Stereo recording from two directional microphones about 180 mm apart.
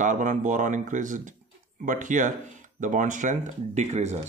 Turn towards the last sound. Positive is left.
turn(degrees=-40)  # may be behind; listen again after turning